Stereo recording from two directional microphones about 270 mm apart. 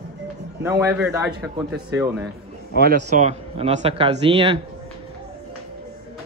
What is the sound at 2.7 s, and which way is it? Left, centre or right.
Speech, right.